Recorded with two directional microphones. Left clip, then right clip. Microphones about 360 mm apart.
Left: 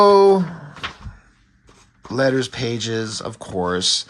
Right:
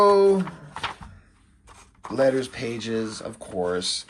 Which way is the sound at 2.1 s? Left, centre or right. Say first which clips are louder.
Left 2 dB; centre.